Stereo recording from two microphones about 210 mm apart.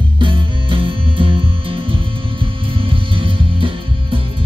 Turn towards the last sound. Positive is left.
turn(degrees=-25)  # may be behind; listen again after turning